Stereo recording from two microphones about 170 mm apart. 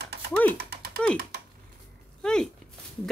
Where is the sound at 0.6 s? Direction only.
70° right (ahead or behind).